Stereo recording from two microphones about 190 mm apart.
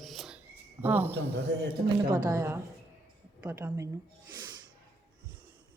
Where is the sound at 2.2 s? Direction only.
15° right (ahead or behind).